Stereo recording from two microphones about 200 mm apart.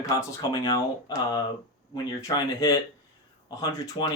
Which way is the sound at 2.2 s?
20° left (ahead or behind).